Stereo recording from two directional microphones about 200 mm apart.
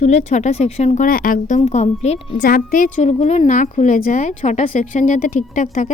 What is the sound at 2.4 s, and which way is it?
A woman's voice, 45° left (ahead or behind).